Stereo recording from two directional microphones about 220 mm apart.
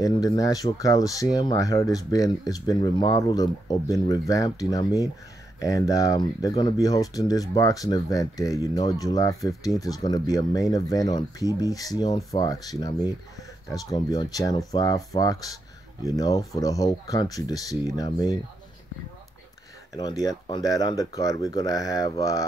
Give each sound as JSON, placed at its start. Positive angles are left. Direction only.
{"t": 0.0, "sound": "speech", "side_deg": 15}
{"t": 19.9, "sound": "speech", "side_deg": 15}